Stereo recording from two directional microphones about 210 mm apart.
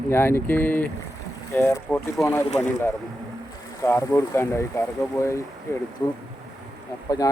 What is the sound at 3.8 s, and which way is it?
Speech, 15° left (ahead or behind).